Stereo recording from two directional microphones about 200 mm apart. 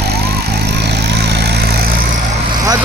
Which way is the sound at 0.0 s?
55° right (ahead or behind).